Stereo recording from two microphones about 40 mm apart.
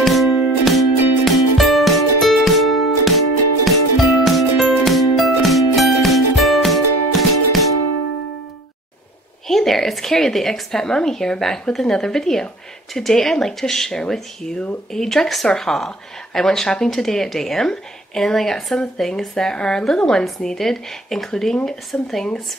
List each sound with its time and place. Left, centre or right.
0.0 s music: centre
9.5 s speech: centre
21.9 s speech: left